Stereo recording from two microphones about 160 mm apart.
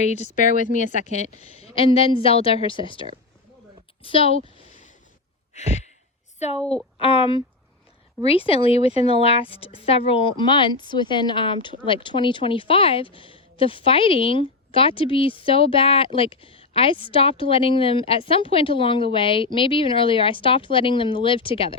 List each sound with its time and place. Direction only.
0.0 s speech: 45° left (ahead or behind)
5.5 s sigh: 45° left (ahead or behind)
7.0 s speech: 35° left (ahead or behind)